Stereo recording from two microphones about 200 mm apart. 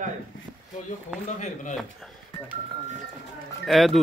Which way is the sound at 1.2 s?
35° left (ahead or behind).